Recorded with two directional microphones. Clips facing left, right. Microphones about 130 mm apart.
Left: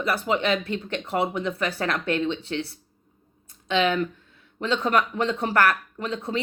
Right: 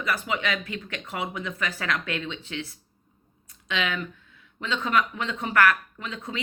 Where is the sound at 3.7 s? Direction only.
30° left (ahead or behind).